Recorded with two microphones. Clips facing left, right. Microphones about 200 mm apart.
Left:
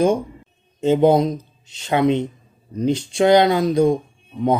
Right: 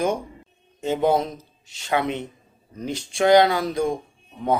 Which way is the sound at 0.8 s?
20° left (ahead or behind).